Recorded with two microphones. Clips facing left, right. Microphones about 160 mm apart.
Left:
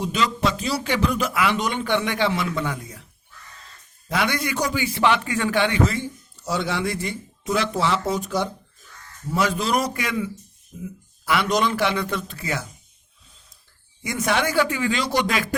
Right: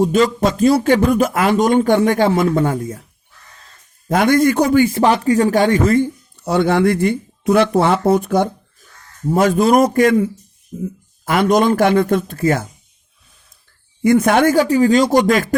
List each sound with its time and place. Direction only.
0.0 s a man's voice: 45° right (ahead or behind)
4.1 s a man's voice: 45° right (ahead or behind)
11.3 s a man's voice: 50° right (ahead or behind)
14.0 s a man's voice: 55° right (ahead or behind)